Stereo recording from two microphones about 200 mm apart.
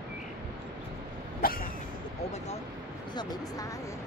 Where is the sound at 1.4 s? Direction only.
45° left (ahead or behind).